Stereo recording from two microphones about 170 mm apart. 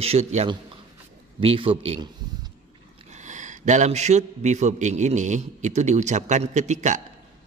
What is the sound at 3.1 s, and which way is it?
A man's voice, 45° right (ahead or behind).